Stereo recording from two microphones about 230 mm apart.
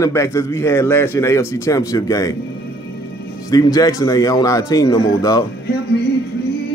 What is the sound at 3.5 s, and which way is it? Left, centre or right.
A man's voice, centre.